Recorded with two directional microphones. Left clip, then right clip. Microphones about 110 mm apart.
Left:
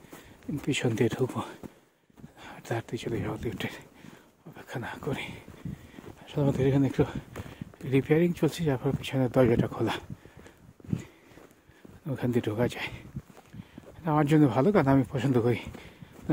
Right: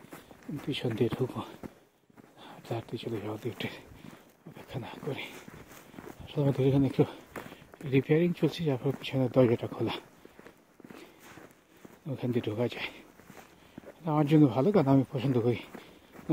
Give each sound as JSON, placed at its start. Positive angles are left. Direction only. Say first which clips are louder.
{"t": 0.7, "sound": "speech", "louder": "left 3 dB", "side_deg": 70}
{"t": 2.4, "sound": "speech", "louder": "left 4 dB", "side_deg": 40}
{"t": 3.2, "sound": "speech", "louder": "left 2 dB", "side_deg": 30}
{"t": 4.6, "sound": "speech", "louder": "left 4 dB", "side_deg": 45}
{"t": 6.2, "sound": "a sound", "louder": "left 2 dB", "side_deg": 40}
{"t": 6.5, "sound": "speech", "louder": "left 1 dB", "side_deg": 25}
{"t": 12.1, "sound": "speech", "louder": "left 3 dB", "side_deg": 45}
{"t": 14.0, "sound": "speech", "louder": "left 1 dB", "side_deg": 45}